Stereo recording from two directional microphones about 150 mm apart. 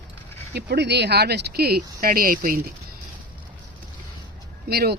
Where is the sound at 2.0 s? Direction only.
75° right (ahead or behind).